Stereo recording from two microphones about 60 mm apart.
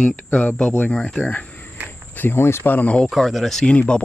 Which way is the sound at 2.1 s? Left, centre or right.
Left.